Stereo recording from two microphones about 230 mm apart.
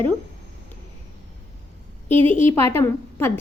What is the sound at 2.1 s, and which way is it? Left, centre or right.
Speech, right.